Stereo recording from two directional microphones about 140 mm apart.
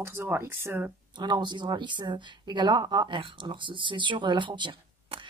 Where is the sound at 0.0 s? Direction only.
15° right (ahead or behind).